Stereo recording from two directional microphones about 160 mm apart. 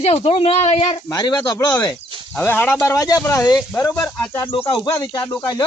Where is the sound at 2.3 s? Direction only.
10° left (ahead or behind).